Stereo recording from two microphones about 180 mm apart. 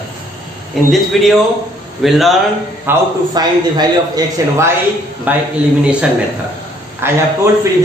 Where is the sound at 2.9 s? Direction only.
20° right (ahead or behind).